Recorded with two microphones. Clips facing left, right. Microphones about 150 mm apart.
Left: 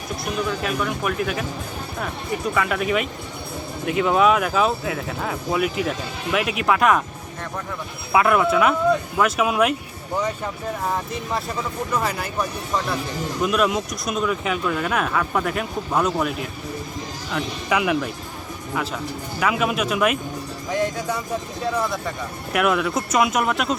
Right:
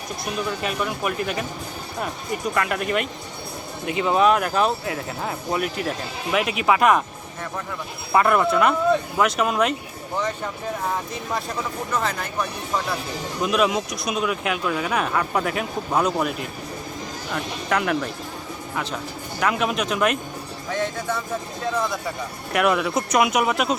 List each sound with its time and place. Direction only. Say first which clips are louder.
0.6 s speech: left 1 dB; 5° right (ahead or behind)
2.6 s speech: left 1 dB; centre (ahead or behind)
8.1 s speech: left 1 dB; centre (ahead or behind)
11.9 s speech: left 1 dB; 10° left (ahead or behind)
22.5 s speech: even; centre (ahead or behind)